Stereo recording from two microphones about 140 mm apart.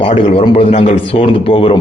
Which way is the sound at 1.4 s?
40° left (ahead or behind).